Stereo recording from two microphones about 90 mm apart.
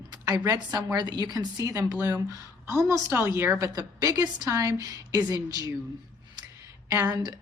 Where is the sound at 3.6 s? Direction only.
40° right (ahead or behind).